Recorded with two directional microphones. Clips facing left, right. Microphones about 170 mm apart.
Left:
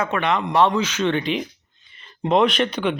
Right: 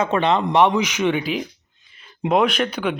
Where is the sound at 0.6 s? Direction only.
15° right (ahead or behind).